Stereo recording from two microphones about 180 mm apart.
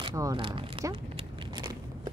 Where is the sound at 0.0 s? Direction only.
20° right (ahead or behind).